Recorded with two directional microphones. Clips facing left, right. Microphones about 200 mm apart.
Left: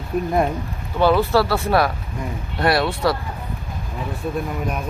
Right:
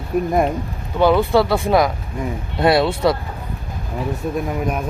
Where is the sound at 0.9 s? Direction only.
15° right (ahead or behind).